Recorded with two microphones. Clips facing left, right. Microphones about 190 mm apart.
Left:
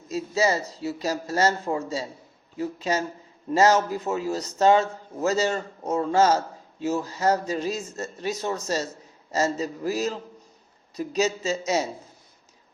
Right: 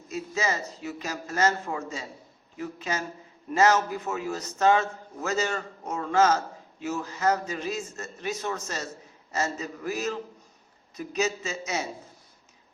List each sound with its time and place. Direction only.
0.1 s a man's voice: 35° left (ahead or behind)